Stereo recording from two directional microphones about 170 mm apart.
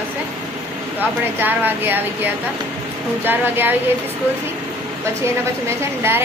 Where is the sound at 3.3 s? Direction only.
10° right (ahead or behind).